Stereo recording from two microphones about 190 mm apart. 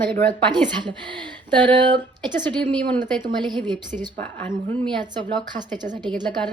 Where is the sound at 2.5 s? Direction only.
25° right (ahead or behind).